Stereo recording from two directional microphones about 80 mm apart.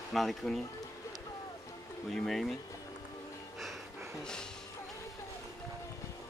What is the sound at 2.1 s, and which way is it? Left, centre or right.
Speech, centre.